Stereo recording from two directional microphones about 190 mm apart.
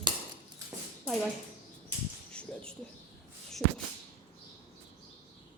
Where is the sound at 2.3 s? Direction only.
5° left (ahead or behind).